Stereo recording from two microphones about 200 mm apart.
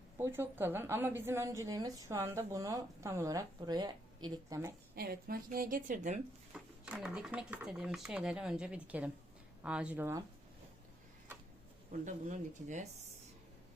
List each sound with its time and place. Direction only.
0.2 s a woman's voice: 10° right (ahead or behind)
4.9 s a woman's voice: 50° right (ahead or behind)
6.5 s a woman's voice: 5° right (ahead or behind)
11.9 s speech: 40° right (ahead or behind)